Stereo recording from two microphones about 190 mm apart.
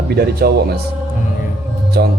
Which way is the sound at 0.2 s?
55° right (ahead or behind).